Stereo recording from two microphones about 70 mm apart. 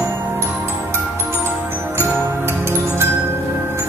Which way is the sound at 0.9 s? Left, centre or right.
Right.